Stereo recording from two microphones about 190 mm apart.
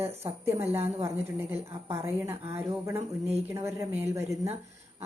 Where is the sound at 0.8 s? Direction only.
30° right (ahead or behind).